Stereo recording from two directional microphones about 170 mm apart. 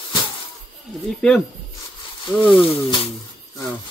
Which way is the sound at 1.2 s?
5° left (ahead or behind).